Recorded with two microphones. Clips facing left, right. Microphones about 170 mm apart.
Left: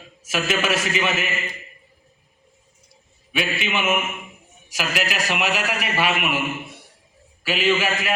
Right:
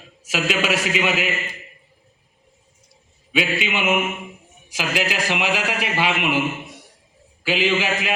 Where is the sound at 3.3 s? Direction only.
15° right (ahead or behind).